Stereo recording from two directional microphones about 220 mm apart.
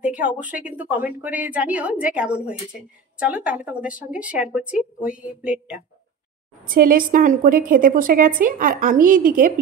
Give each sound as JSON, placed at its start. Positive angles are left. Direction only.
{"t": 0.0, "sound": "a woman's voice", "side_deg": -5}
{"t": 6.7, "sound": "a woman's voice", "side_deg": -40}